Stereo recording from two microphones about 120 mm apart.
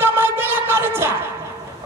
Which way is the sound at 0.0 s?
20° right (ahead or behind).